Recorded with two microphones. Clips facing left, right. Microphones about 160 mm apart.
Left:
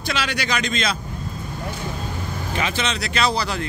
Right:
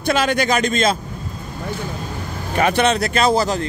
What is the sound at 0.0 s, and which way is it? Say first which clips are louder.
Speech: right 8 dB; 50° right (ahead or behind).